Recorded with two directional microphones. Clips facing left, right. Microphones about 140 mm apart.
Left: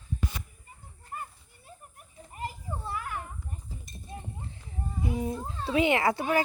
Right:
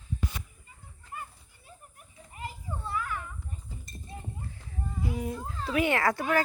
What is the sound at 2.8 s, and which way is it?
Children playing, 40° left (ahead or behind).